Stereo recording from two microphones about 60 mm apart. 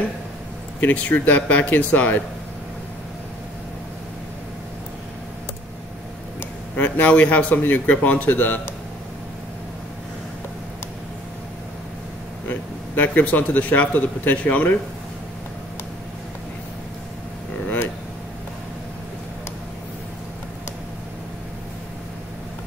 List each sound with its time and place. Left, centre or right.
0.7 s speech: left
6.8 s speech: left
12.4 s a man's voice: left